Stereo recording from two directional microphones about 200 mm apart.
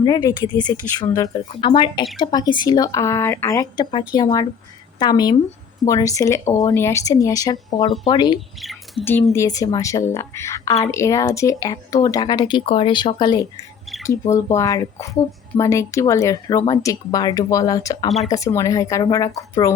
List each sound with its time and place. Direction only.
0.0 s a woman's voice: 20° left (ahead or behind)
8.6 s squawk: centre (ahead or behind)
9.0 s a woman's voice: 10° left (ahead or behind)